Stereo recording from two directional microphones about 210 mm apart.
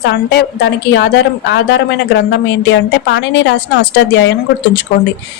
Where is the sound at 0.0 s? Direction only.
50° left (ahead or behind).